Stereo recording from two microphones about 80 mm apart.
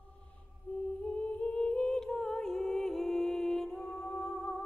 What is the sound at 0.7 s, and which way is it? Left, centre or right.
Humming, left.